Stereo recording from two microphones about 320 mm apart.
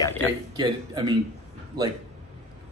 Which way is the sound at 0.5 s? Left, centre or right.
Centre.